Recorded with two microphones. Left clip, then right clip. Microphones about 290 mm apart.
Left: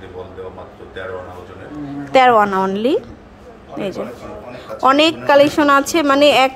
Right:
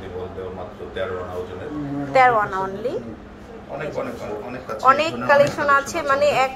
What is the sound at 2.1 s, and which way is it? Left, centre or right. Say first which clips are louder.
Speech: left 5 dB; left.